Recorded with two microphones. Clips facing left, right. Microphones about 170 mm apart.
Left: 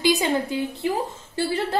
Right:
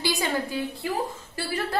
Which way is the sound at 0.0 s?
20° left (ahead or behind).